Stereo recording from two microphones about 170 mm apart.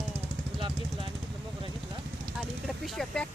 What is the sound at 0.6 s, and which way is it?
Speech, 30° right (ahead or behind).